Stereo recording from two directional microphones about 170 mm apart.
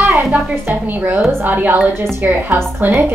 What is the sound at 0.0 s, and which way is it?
A woman's voice, 10° right (ahead or behind).